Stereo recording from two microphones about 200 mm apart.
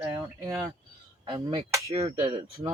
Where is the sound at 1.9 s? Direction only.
30° right (ahead or behind).